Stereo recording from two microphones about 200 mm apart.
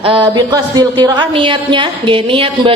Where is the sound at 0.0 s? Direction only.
25° right (ahead or behind).